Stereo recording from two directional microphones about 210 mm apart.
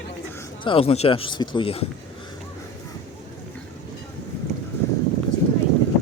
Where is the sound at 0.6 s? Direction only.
25° left (ahead or behind).